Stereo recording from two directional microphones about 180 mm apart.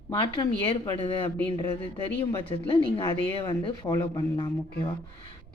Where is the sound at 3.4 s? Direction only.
20° left (ahead or behind).